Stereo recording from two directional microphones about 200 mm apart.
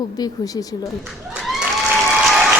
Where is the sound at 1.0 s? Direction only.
Centre (ahead or behind).